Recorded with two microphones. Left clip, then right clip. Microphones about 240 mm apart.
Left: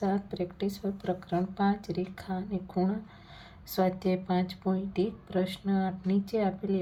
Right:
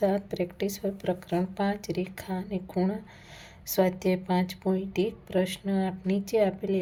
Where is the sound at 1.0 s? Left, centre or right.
Right.